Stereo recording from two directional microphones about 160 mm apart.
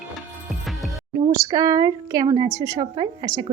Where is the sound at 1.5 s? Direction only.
20° right (ahead or behind).